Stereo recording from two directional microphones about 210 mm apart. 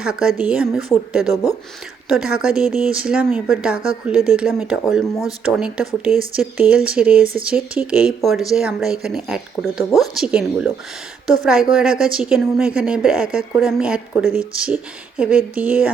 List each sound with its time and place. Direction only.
0.0 s a woman's voice: 5° right (ahead or behind)